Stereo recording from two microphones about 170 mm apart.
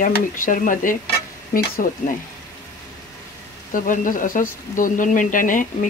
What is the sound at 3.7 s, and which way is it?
Speech, 50° left (ahead or behind).